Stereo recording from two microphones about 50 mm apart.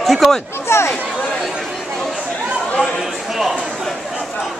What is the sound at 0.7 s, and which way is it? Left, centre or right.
Speech, left.